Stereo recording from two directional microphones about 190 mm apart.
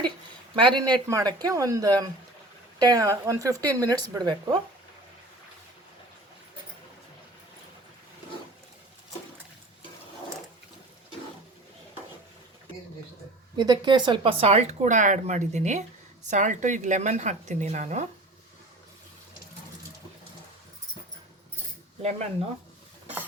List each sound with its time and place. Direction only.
0.6 s speech: 25° right (ahead or behind)
13.6 s speech: 25° right (ahead or behind)